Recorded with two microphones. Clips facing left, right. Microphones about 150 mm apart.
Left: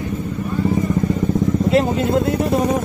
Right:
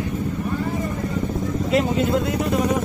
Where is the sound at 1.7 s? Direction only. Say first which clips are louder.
Left 1 dB; 35° left (ahead or behind).